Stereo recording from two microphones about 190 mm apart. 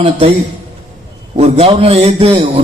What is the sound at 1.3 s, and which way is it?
A man's voice, 35° right (ahead or behind).